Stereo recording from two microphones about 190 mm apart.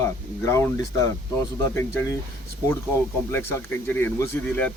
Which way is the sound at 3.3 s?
10° left (ahead or behind).